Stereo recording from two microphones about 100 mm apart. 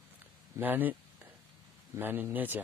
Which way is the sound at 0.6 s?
20° right (ahead or behind).